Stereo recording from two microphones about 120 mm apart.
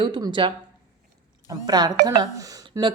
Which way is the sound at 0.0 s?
40° right (ahead or behind).